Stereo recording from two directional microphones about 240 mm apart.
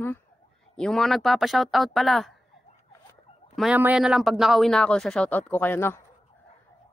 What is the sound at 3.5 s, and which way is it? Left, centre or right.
Speech, centre.